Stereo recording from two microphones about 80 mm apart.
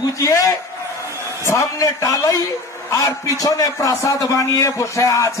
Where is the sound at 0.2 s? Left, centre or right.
Left.